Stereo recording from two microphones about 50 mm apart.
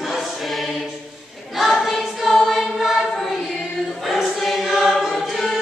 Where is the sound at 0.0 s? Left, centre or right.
Centre.